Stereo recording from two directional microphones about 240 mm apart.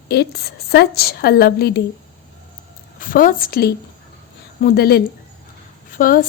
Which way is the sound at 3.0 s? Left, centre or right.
Left.